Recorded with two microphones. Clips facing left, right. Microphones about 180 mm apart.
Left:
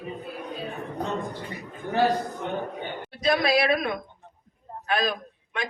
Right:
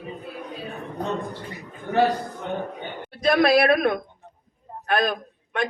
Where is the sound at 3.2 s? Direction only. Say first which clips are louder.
Right 5 dB; 55° right (ahead or behind).